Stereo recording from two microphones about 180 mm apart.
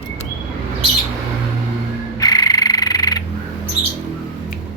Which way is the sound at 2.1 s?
20° left (ahead or behind).